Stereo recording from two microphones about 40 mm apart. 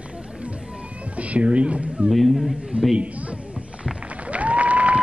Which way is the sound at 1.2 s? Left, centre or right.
Right.